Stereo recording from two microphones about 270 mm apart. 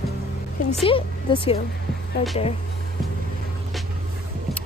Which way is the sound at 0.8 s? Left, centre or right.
Centre.